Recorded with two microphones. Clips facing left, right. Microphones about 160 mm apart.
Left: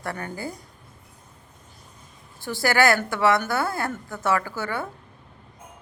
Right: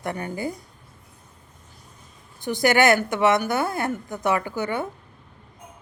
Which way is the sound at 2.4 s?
20° right (ahead or behind).